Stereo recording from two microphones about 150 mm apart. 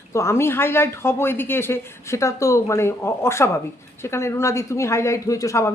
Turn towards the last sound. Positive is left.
turn(degrees=20)  # may be behind; listen again after turning